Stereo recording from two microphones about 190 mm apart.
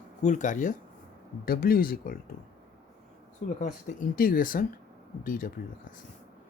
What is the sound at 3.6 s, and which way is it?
Speech, 45° left (ahead or behind).